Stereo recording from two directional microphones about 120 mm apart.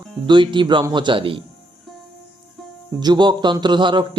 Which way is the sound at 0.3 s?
40° right (ahead or behind).